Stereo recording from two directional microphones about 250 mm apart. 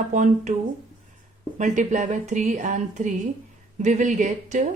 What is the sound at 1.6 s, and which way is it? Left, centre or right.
Speech, right.